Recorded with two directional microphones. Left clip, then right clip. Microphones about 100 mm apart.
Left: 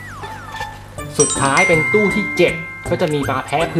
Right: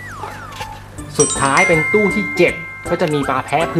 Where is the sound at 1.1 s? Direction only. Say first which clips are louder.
Right 1 dB; centre (ahead or behind).